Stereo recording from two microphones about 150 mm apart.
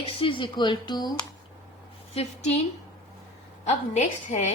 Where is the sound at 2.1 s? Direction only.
45° left (ahead or behind).